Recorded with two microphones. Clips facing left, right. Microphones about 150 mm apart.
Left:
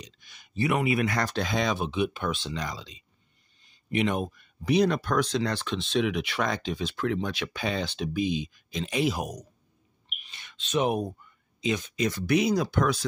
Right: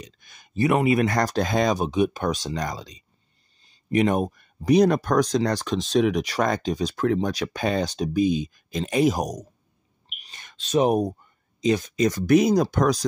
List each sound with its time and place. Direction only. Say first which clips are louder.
0.0 s speech: right 4 dB; 50° right (ahead or behind)